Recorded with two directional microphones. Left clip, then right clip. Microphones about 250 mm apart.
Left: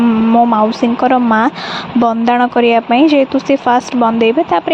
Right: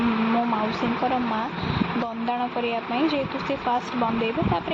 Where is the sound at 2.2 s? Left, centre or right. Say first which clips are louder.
Left 14 dB; left.